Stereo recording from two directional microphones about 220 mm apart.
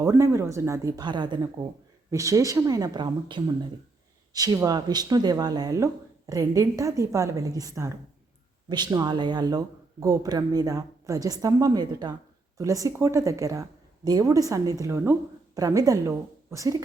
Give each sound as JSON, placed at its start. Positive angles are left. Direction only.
{"t": 0.0, "sound": "speech", "side_deg": -10}